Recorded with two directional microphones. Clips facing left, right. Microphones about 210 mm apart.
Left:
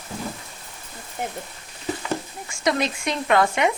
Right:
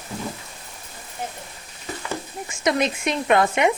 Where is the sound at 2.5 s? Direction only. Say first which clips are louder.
Right 1 dB; 20° right (ahead or behind).